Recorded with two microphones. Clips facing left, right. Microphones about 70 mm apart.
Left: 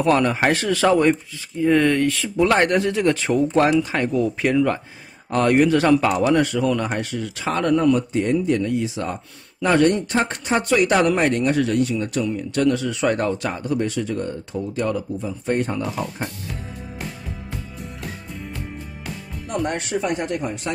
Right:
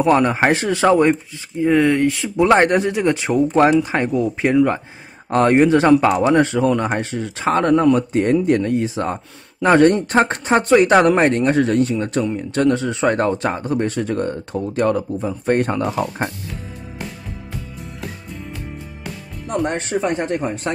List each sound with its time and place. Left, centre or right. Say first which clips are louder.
0.0 s speech: right 3 dB; right
19.6 s speech: right 3 dB; right